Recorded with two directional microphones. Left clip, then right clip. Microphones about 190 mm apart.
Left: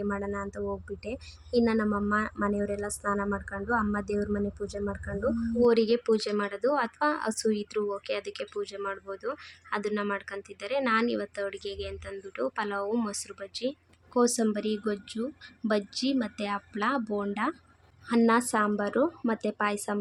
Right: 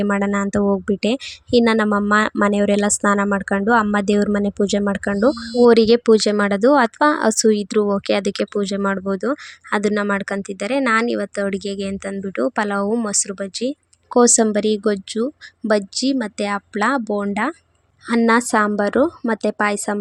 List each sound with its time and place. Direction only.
0.0 s speech: 45° right (ahead or behind)